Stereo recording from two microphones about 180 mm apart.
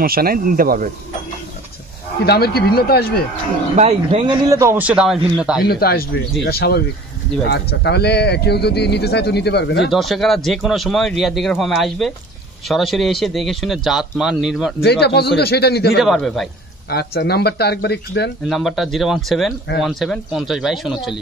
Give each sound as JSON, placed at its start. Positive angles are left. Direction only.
{"t": 0.0, "sound": "speech", "side_deg": -55}
{"t": 2.2, "sound": "speech", "side_deg": 60}
{"t": 3.7, "sound": "speech", "side_deg": -35}
{"t": 4.5, "sound": "a man's voice", "side_deg": -15}
{"t": 5.6, "sound": "speech", "side_deg": 60}
{"t": 9.8, "sound": "speech", "side_deg": 0}
{"t": 14.8, "sound": "speech", "side_deg": 65}
{"t": 16.0, "sound": "speech", "side_deg": 0}
{"t": 16.9, "sound": "speech", "side_deg": 65}
{"t": 18.5, "sound": "speech", "side_deg": 0}